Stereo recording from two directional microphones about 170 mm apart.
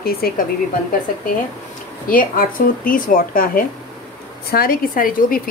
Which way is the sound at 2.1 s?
55° left (ahead or behind).